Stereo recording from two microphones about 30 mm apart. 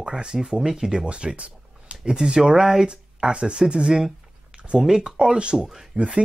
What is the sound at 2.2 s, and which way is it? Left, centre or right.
Speech, right.